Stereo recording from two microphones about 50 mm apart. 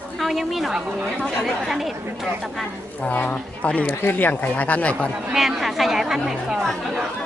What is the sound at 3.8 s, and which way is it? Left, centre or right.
Speech, left.